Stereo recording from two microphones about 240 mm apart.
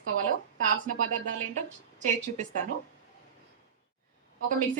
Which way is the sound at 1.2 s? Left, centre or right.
Right.